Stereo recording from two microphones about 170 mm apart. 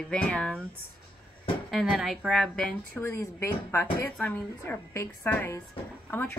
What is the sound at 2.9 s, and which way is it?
A woman's voice, 15° left (ahead or behind).